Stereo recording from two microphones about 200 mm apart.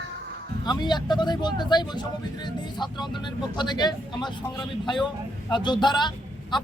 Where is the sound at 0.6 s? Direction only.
20° left (ahead or behind).